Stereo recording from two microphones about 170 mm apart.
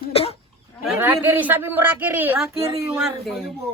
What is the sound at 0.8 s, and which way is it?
Speech, 10° right (ahead or behind).